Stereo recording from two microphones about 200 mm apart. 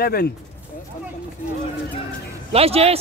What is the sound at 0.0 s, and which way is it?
Speech, 50° left (ahead or behind).